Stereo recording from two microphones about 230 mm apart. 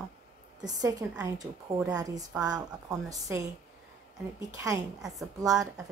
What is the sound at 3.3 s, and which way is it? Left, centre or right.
Speech, centre.